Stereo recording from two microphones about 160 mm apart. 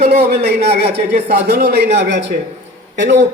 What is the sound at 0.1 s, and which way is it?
A man's voice, 80° right.